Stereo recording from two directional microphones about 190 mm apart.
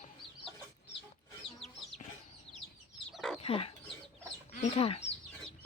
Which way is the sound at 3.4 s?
30° left (ahead or behind).